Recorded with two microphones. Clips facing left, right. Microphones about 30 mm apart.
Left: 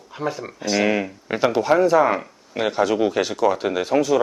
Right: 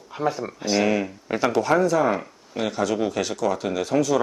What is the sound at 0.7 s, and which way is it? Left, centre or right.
Speech, centre.